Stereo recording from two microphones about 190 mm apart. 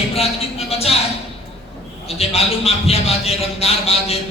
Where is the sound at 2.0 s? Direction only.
30° left (ahead or behind).